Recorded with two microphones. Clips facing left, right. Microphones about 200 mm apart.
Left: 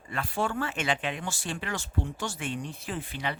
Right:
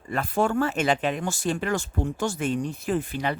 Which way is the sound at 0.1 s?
45° right (ahead or behind).